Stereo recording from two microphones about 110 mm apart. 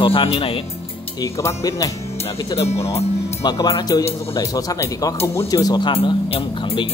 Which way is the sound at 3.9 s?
35° left (ahead or behind).